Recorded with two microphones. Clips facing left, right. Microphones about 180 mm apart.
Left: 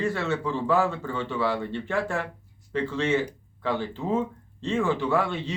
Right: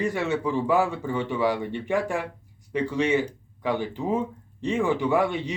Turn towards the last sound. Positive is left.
turn(degrees=-15)  # may be behind; listen again after turning